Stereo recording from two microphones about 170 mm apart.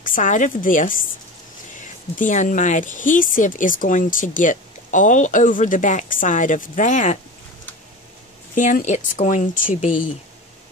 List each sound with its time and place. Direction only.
0.0 s speech: 50° left (ahead or behind)
8.5 s speech: 50° left (ahead or behind)